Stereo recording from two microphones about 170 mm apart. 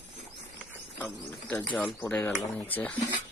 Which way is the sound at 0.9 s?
10° left (ahead or behind).